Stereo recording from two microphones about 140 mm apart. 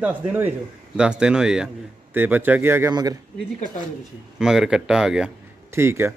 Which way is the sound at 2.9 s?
25° right (ahead or behind).